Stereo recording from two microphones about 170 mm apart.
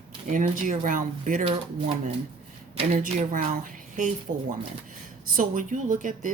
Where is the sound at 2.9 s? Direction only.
50° right (ahead or behind).